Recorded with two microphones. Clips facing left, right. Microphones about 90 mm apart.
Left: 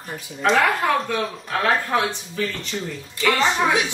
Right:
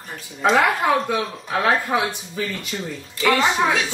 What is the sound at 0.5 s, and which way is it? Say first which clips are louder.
Speech: right 1 dB; 15° right (ahead or behind).